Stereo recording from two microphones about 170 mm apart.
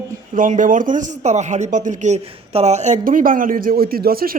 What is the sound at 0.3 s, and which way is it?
A woman's voice, 50° right (ahead or behind).